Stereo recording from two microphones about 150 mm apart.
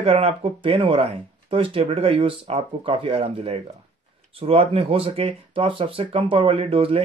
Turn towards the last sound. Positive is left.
turn(degrees=-40)  # may be behind; listen again after turning